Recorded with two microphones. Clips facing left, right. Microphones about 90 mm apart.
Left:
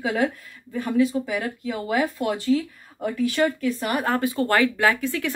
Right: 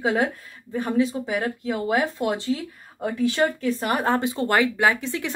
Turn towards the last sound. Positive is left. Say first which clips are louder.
# even
turn(degrees=-20)  # may be behind; listen again after turning